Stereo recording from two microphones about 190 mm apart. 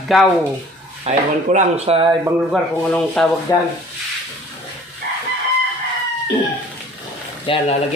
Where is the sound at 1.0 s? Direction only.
35° right (ahead or behind).